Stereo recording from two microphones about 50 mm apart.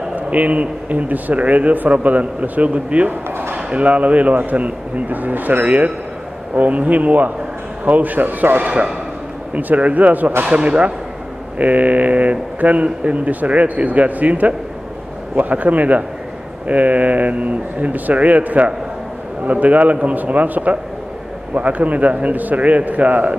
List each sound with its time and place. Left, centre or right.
0.1 s speech: right
3.3 s a sound: right
3.5 s speech: right
8.6 s speech: right
10.4 s speech: right